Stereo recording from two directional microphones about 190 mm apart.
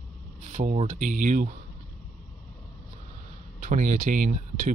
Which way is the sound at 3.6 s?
40° right (ahead or behind).